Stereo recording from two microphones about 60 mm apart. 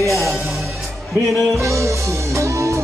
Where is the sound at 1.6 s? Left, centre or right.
Right.